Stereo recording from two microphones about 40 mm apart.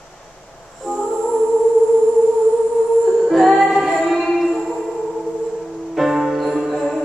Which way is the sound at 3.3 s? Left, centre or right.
Centre.